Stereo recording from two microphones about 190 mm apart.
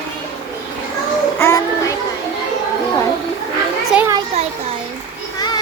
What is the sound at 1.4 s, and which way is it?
Music, 15° left (ahead or behind).